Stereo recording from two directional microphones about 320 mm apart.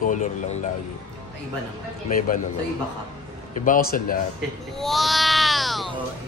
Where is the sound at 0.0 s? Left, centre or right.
Left.